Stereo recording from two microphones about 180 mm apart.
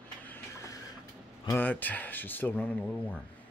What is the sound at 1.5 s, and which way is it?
Speech, 10° left (ahead or behind).